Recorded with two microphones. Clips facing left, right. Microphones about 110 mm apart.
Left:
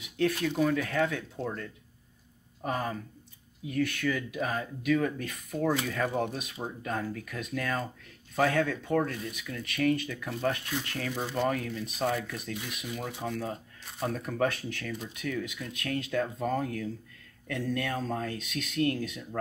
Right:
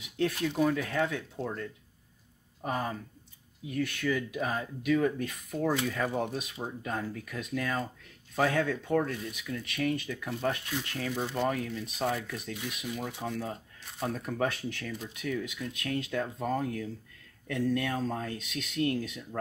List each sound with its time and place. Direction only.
0.5 s speech: 10° right (ahead or behind)
2.6 s speech: 15° right (ahead or behind)
11.1 s speech: centre (ahead or behind)
11.4 s speech: 15° right (ahead or behind)